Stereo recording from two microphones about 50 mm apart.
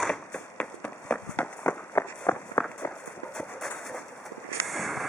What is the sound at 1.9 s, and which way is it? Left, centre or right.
Walk, left.